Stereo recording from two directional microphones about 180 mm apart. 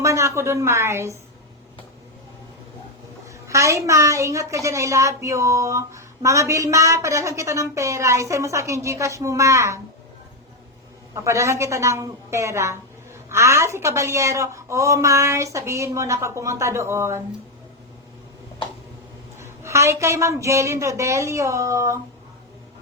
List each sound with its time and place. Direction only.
0.0 s a woman's voice: 15° right (ahead or behind)
3.4 s a woman's voice: 15° right (ahead or behind)
11.1 s a woman's voice: 15° right (ahead or behind)
19.4 s a woman's voice: 15° right (ahead or behind)